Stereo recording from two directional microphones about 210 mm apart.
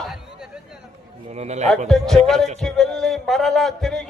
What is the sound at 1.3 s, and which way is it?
Speech, 30° right (ahead or behind).